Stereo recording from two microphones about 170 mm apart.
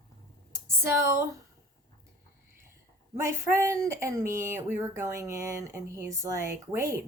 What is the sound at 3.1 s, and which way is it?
Speech, 15° right (ahead or behind).